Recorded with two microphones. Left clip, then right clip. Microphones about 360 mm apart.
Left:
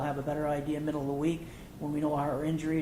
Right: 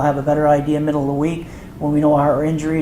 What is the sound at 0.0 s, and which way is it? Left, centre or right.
Speech, right.